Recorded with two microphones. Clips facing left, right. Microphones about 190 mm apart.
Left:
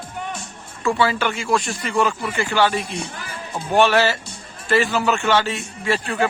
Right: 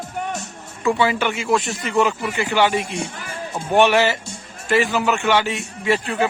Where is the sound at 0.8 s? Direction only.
20° right (ahead or behind).